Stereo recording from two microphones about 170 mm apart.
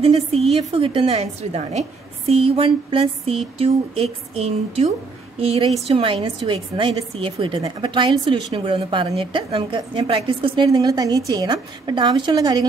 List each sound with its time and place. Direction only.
0.0 s a woman's voice: 35° right (ahead or behind)